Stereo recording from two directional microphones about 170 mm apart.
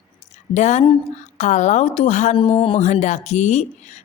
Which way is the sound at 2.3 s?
30° left (ahead or behind).